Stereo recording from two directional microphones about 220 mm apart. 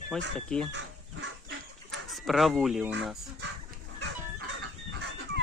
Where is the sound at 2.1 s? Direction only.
Centre (ahead or behind).